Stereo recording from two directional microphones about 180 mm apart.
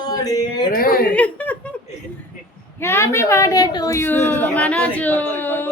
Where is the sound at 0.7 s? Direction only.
55° left (ahead or behind).